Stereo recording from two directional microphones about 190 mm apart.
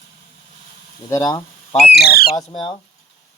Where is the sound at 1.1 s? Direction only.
20° left (ahead or behind).